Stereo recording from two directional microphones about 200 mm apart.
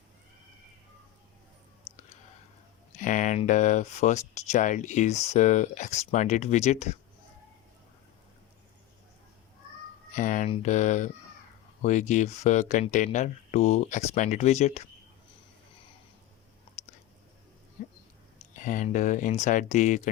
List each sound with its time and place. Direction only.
2.9 s speech: 40° left (ahead or behind)
10.1 s speech: 40° left (ahead or behind)
16.8 s a sound: 35° left (ahead or behind)
18.3 s speech: 40° left (ahead or behind)